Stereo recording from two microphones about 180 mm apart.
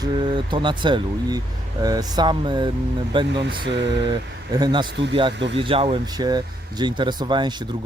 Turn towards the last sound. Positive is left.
turn(degrees=-25)  # may be behind; listen again after turning